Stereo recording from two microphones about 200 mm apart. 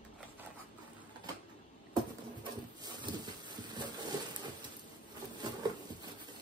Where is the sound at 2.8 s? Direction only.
20° right (ahead or behind).